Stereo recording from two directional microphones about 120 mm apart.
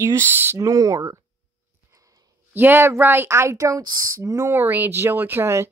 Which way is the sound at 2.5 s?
20° right (ahead or behind).